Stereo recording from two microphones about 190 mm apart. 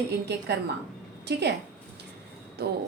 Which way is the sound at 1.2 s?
60° right (ahead or behind).